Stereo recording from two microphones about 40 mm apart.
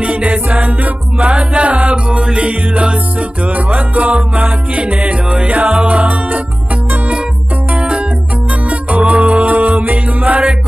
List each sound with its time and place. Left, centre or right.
0.0 s music: right
7.7 s music: right